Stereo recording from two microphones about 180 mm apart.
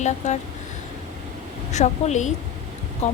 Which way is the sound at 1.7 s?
40° left (ahead or behind).